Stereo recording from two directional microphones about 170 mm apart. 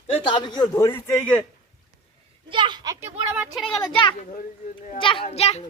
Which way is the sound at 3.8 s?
30° left (ahead or behind).